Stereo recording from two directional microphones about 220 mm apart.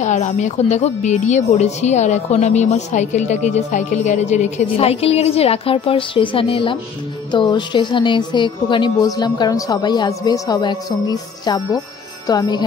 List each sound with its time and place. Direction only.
0.0 s a woman's voice: 30° left (ahead or behind)